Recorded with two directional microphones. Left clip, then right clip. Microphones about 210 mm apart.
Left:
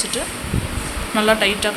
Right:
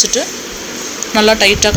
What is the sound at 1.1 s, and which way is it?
Speech, 25° right (ahead or behind).